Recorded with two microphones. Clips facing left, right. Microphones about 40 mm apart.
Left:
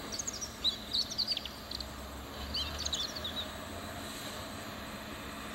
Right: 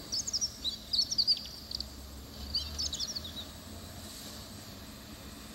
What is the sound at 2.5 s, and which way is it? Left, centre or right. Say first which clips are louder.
Bird: left 1 dB; left.